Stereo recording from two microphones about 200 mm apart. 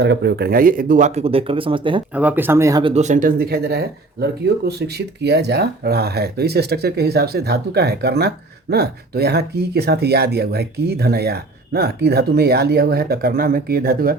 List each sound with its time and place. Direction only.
0.0 s speech: 60° right (ahead or behind); by 2.0 s 25° right (ahead or behind)
2.1 s speech: 10° right (ahead or behind)
2.9 s speech: 35° right (ahead or behind)